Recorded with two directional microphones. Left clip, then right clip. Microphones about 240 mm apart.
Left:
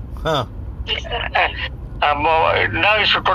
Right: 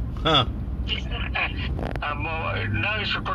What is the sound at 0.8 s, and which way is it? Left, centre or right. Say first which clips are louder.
Speech: left 8 dB; left.